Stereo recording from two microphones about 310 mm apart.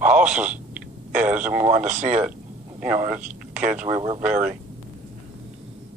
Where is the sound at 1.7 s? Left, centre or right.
Right.